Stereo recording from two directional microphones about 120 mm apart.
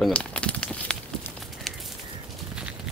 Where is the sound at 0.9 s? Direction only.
5° left (ahead or behind).